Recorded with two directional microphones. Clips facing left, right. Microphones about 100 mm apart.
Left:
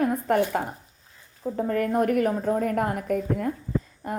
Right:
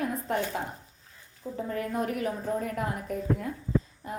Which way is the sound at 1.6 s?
55° left (ahead or behind).